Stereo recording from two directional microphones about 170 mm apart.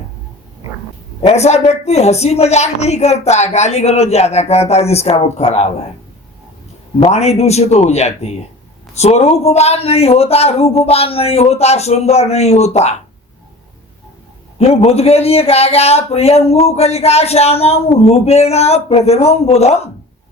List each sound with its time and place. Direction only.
1.2 s speech: 40° left (ahead or behind)
7.0 s speech: 40° left (ahead or behind)
14.6 s speech: 40° left (ahead or behind)